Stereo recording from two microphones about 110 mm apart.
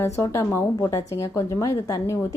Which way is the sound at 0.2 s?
25° left (ahead or behind).